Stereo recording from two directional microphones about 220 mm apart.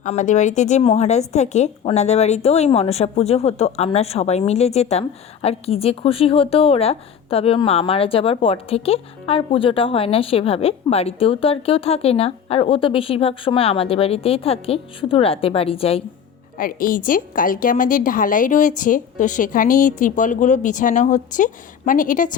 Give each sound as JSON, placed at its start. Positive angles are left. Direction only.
{"t": 0.0, "sound": "a woman's voice", "side_deg": 35}
{"t": 16.6, "sound": "a woman's voice", "side_deg": 40}